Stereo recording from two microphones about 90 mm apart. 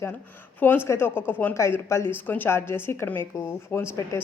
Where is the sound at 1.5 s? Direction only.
35° left (ahead or behind).